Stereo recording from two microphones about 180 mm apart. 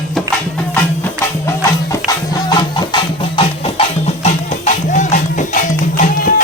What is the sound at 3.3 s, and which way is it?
Music, 35° left (ahead or behind).